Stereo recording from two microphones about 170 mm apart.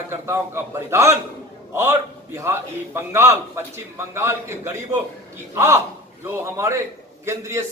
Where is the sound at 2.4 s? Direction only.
15° right (ahead or behind).